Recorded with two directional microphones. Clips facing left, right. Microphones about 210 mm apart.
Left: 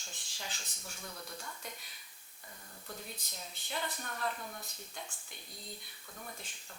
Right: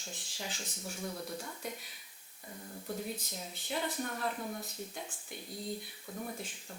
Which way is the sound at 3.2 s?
5° right (ahead or behind).